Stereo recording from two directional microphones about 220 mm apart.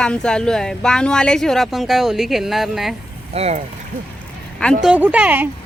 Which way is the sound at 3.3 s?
30° right (ahead or behind).